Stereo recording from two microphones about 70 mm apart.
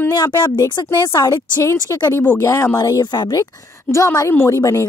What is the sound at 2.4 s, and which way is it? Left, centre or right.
Speech, left.